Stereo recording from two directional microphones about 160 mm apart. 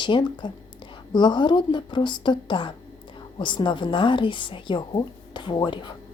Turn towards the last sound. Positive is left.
turn(degrees=30)  # may be behind; listen again after turning